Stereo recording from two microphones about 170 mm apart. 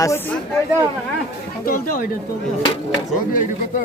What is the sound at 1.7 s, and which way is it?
Speech, 55° left (ahead or behind).